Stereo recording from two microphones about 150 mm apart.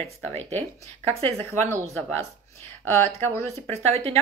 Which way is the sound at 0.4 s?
45° right (ahead or behind).